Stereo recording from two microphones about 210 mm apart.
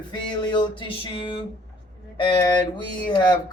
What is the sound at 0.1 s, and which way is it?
Speech, 20° left (ahead or behind).